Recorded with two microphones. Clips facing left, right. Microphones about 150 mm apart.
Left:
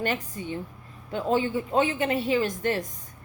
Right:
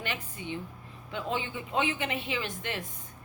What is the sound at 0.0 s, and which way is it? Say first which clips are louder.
A woman's voice: left 8 dB; 40° left (ahead or behind).